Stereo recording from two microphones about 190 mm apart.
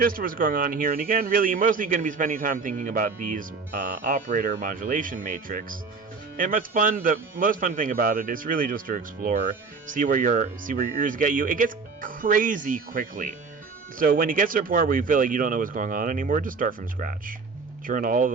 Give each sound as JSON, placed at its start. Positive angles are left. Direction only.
{"t": 0.0, "sound": "a man's voice", "side_deg": -50}